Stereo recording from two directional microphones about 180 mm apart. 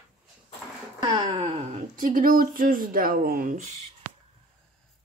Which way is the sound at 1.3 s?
45° right (ahead or behind).